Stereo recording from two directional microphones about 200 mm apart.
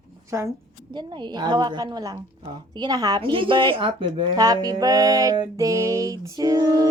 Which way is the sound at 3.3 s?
25° right (ahead or behind).